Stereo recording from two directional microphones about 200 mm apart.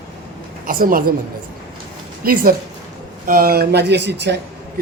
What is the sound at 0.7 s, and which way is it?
Speech, 45° right (ahead or behind).